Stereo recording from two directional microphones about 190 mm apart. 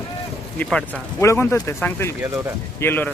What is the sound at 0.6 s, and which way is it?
Speech, 5° left (ahead or behind).